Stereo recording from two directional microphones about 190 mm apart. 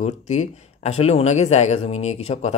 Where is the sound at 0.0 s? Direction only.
40° left (ahead or behind).